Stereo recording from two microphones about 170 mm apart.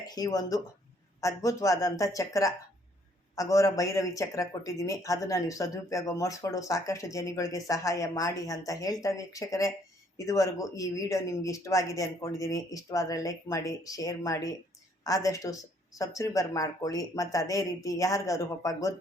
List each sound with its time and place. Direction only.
0.1 s speech: 20° left (ahead or behind)